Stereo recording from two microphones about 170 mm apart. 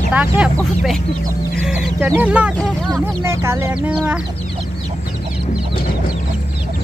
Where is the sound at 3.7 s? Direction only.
5° right (ahead or behind).